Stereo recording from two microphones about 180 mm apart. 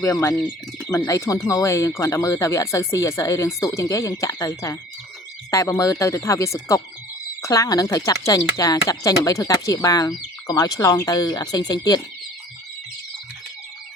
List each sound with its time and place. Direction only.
0.0 s speech: 15° left (ahead or behind)